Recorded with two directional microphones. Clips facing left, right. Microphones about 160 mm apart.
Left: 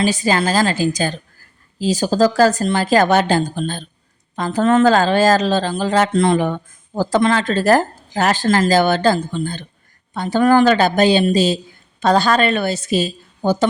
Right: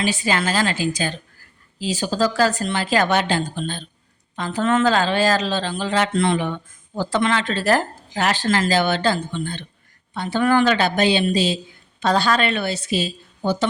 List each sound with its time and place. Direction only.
0.0 s a woman's voice: 40° left (ahead or behind)